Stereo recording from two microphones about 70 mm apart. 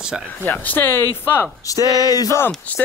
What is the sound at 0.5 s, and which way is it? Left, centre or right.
Speech, left.